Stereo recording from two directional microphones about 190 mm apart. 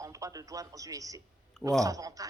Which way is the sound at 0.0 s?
15° right (ahead or behind).